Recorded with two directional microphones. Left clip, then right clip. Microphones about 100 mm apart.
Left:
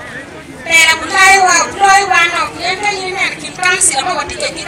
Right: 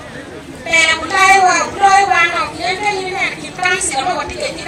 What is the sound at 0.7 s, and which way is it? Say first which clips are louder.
Child singing: left 3 dB; 20° left (ahead or behind).